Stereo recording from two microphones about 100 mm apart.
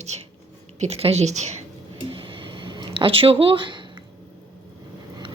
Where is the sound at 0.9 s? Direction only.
90° right.